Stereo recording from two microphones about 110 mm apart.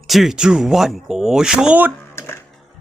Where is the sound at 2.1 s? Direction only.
25° left (ahead or behind).